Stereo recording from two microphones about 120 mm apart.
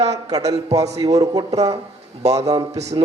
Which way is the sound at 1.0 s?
30° right (ahead or behind).